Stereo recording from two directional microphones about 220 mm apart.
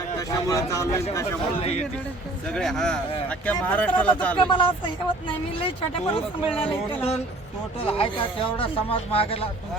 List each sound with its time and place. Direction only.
0.2 s speech: 15° left (ahead or behind)
2.5 s speech: centre (ahead or behind)
4.4 s speech: 20° left (ahead or behind)